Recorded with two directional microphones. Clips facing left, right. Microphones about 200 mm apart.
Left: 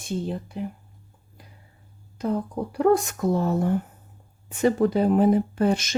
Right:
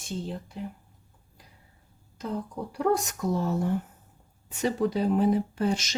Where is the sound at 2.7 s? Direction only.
55° left (ahead or behind).